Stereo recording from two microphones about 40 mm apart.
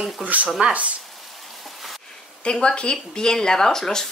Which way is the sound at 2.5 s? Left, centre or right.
Left.